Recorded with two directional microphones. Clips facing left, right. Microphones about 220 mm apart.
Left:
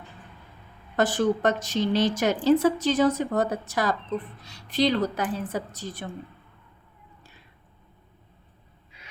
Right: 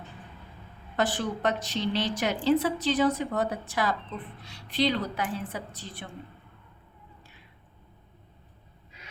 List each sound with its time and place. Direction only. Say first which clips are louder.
0.9 s a woman's voice: left 6 dB; 45° left (ahead or behind)